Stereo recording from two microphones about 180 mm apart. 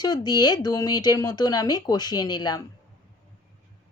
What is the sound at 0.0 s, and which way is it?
Speech, 20° left (ahead or behind).